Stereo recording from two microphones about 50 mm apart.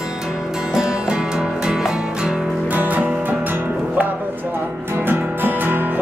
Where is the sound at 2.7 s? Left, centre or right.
Right.